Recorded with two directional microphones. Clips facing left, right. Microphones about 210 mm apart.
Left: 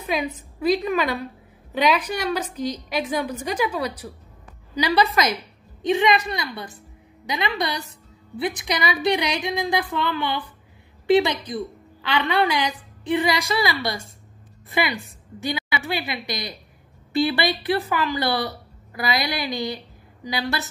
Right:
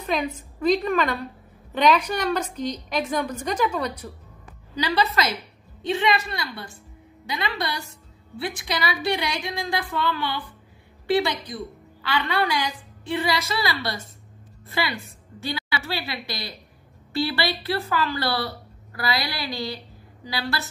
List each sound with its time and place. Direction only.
0.0 s a woman's voice: 5° left (ahead or behind)